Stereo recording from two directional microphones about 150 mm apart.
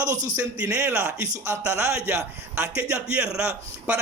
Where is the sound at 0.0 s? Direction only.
25° right (ahead or behind).